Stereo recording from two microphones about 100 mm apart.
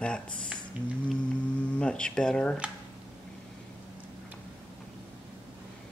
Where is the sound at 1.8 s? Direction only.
10° left (ahead or behind).